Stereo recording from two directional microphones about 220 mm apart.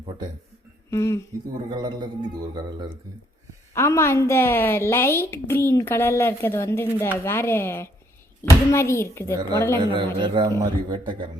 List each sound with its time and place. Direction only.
0.9 s speech: 10° left (ahead or behind)
1.7 s a man's voice: 20° right (ahead or behind)
3.8 s a woman's voice: 10° left (ahead or behind)
9.7 s a man's voice: 20° right (ahead or behind)